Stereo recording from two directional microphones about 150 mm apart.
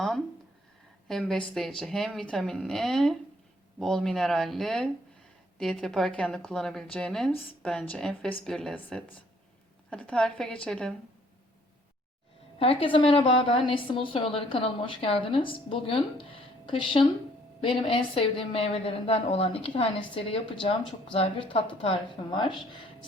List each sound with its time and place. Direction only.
1.0 s speech: 5° left (ahead or behind)
12.5 s a woman's voice: 35° left (ahead or behind)